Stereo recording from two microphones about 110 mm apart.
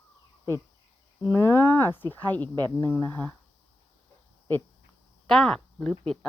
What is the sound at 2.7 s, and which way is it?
Speech, 15° left (ahead or behind).